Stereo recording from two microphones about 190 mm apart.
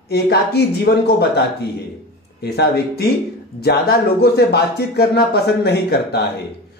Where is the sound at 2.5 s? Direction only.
55° left (ahead or behind).